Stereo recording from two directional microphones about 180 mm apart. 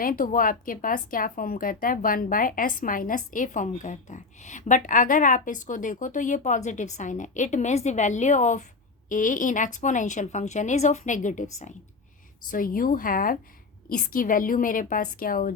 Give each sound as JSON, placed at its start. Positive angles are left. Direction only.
{"t": 0.0, "sound": "a woman's voice", "side_deg": 50}
{"t": 12.5, "sound": "a woman's voice", "side_deg": 50}